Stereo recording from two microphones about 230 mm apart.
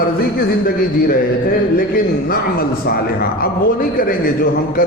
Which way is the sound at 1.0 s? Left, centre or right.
Left.